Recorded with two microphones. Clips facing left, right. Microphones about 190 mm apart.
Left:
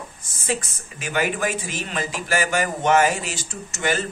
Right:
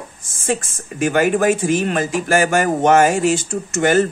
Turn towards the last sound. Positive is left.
turn(degrees=-50)  # may be behind; listen again after turning